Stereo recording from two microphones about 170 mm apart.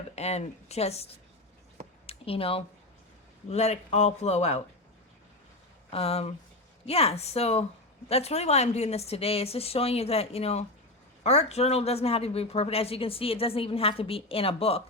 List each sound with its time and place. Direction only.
0.2 s speech: 40° left (ahead or behind)
5.9 s speech: 35° left (ahead or behind)